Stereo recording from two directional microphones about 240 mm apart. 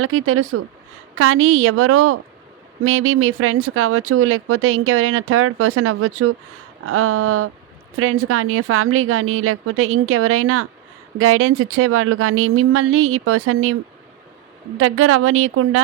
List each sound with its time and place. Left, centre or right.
0.0 s speech: right
14.8 s speech: right